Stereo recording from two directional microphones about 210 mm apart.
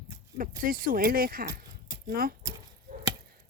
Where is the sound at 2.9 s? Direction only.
45° right (ahead or behind).